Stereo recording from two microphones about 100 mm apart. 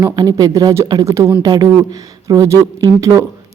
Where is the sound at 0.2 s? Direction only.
35° right (ahead or behind).